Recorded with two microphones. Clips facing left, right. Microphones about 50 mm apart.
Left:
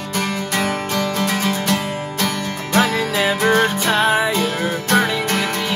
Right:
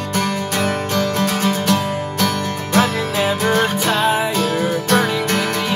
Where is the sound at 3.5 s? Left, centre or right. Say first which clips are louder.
Left 1 dB; left.